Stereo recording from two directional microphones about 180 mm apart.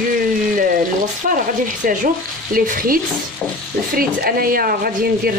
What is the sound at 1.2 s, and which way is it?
A man's voice, 50° right (ahead or behind).